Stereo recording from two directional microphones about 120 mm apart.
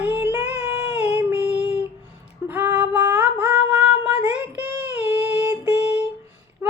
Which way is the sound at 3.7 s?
10° right (ahead or behind).